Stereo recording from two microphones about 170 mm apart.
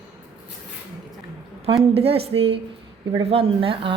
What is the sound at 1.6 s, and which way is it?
A woman's voice, 35° right (ahead or behind).